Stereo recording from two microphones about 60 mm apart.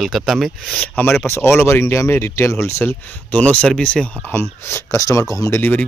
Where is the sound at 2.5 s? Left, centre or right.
Left.